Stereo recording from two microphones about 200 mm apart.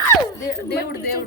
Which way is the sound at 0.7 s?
50° left (ahead or behind).